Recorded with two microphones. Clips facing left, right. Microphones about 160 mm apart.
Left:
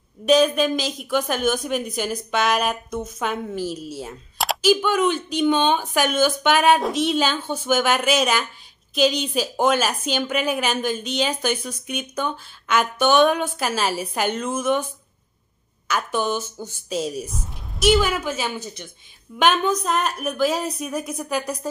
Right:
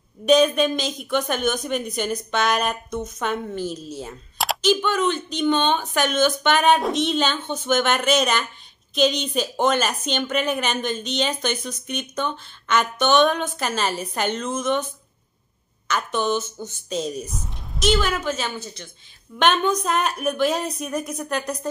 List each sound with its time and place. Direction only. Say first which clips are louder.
0.2 s a woman's voice: even; centre (ahead or behind)
15.9 s a woman's voice: even; 10° left (ahead or behind)